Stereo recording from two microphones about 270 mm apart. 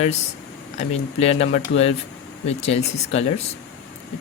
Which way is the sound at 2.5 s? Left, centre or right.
Left.